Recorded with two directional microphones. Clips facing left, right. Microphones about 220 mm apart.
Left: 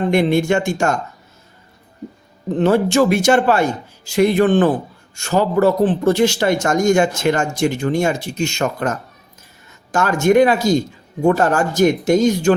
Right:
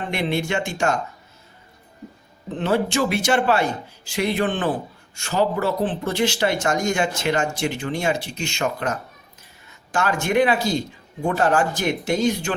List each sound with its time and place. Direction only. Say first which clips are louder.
0.1 s a man's voice: left 7 dB; 45° left (ahead or behind)
2.6 s a man's voice: left 7 dB; 45° left (ahead or behind)